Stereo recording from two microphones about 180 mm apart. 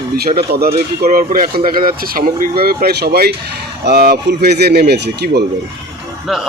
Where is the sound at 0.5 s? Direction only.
65° right (ahead or behind).